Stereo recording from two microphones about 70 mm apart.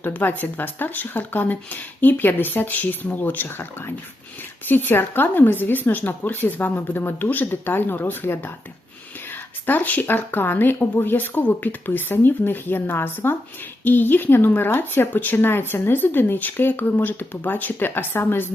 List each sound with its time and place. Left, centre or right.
0.0 s speech: left